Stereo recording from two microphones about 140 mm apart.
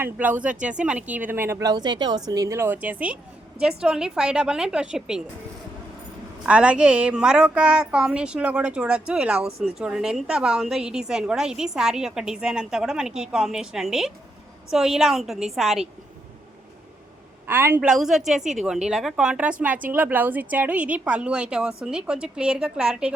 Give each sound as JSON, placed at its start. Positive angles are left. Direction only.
{"t": 0.0, "sound": "a woman's voice", "side_deg": -10}
{"t": 1.7, "sound": "a woman's voice", "side_deg": -30}
{"t": 6.4, "sound": "a woman's voice", "side_deg": -10}
{"t": 17.4, "sound": "a woman's voice", "side_deg": -15}
{"t": 17.8, "sound": "a woman's voice", "side_deg": -5}